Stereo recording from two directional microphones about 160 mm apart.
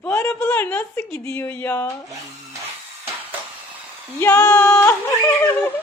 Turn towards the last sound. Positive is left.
turn(degrees=15)  # may be behind; listen again after turning